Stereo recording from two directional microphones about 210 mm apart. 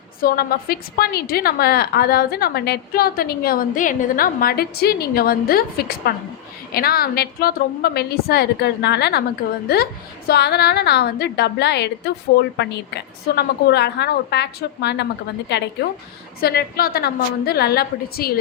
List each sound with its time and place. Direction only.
0.2 s a woman's voice: 45° left (ahead or behind)